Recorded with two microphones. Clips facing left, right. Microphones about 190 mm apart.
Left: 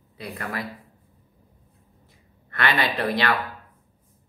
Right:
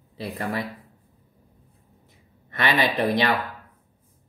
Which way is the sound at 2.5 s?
20° right (ahead or behind).